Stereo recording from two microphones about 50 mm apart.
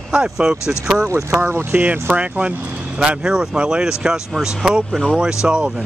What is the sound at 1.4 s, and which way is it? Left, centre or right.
Speech, right.